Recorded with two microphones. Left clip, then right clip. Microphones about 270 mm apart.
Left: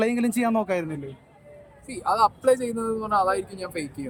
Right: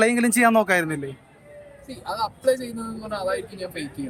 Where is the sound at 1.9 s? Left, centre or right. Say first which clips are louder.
Left 7 dB; centre.